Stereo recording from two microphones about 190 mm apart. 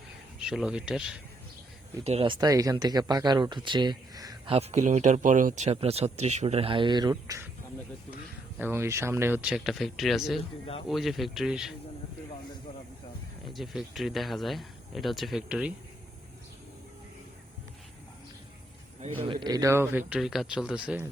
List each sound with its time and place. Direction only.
0.3 s speech: 5° right (ahead or behind)
2.0 s speech: 30° right (ahead or behind)
4.5 s speech: 35° right (ahead or behind); by 7.4 s 20° right (ahead or behind)
8.5 s a man's voice: 10° right (ahead or behind)
13.5 s speech: centre (ahead or behind)
19.0 s a man's voice: 30° right (ahead or behind); by 21.1 s 5° right (ahead or behind)